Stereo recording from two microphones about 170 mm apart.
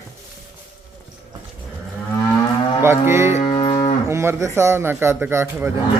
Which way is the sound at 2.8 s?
15° right (ahead or behind).